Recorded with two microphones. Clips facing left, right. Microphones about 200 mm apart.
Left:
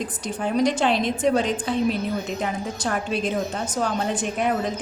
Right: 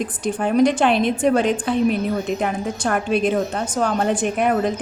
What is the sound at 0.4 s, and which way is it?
A woman's voice, 55° right (ahead or behind).